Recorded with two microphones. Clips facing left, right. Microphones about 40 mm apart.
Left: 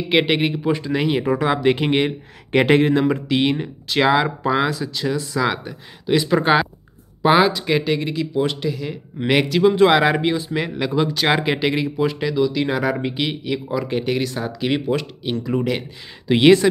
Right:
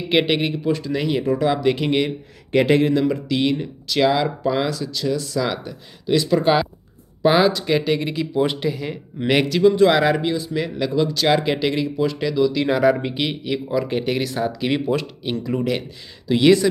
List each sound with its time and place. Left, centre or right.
0.1 s speech: centre; by 6.7 s left
7.2 s speech: centre
9.2 s speech: centre
9.8 s speech: left; by 15.8 s centre
16.3 s speech: left